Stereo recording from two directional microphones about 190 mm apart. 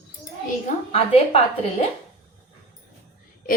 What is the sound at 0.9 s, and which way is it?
Speech, 30° left (ahead or behind).